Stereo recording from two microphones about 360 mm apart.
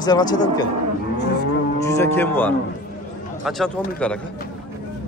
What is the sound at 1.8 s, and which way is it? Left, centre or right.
Livestock, centre.